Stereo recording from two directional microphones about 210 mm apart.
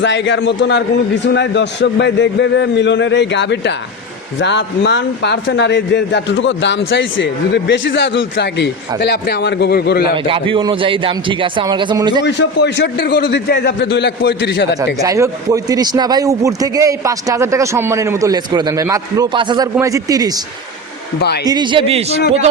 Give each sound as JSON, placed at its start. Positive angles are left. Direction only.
{"t": 0.0, "sound": "a man's voice", "side_deg": 60}
{"t": 10.2, "sound": "a man's voice", "side_deg": -25}
{"t": 12.2, "sound": "speech", "side_deg": 55}
{"t": 15.0, "sound": "a man's voice", "side_deg": -15}
{"t": 21.2, "sound": "a man's voice", "side_deg": 50}
{"t": 21.4, "sound": "a man's voice", "side_deg": -20}